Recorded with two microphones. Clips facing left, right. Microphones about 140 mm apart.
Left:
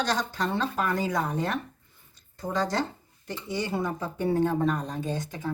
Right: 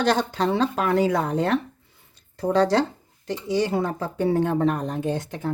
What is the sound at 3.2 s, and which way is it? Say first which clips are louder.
Speech: right 8 dB; 90° right.